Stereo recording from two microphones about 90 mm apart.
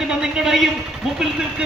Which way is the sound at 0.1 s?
5° right (ahead or behind).